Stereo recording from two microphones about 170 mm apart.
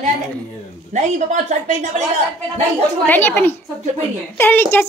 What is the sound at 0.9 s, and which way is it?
Speech, 45° right (ahead or behind).